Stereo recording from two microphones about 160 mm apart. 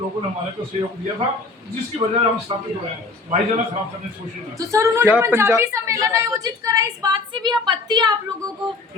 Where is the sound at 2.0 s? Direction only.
25° right (ahead or behind).